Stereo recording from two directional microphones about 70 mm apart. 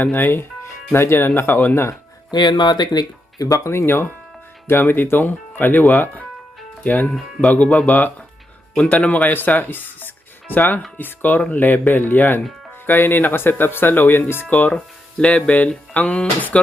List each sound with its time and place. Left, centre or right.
0.0 s speech: left
2.3 s speech: left
3.7 s speech: left
7.1 s speech: centre
7.5 s speech: centre
14.7 s speech: centre